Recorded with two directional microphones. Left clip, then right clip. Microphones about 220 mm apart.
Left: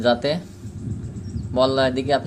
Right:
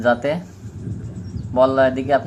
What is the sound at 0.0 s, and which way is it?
Speech, 40° left (ahead or behind).